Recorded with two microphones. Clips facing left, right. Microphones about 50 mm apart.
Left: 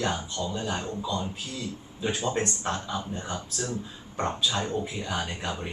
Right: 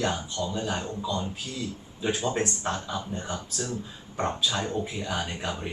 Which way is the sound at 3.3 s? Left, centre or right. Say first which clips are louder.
Even; centre.